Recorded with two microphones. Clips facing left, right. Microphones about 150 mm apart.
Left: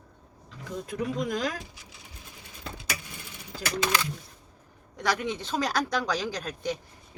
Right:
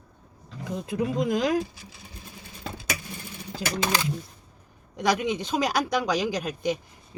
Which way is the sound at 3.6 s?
25° right (ahead or behind).